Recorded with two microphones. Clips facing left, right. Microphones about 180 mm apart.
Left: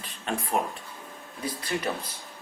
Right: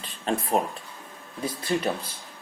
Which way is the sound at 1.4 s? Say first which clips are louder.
Right 4 dB; 25° right (ahead or behind).